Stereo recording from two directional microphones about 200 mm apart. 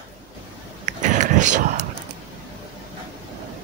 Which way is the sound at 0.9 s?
40° right (ahead or behind).